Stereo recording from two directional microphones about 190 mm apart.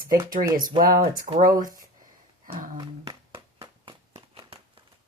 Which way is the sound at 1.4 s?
45° right (ahead or behind).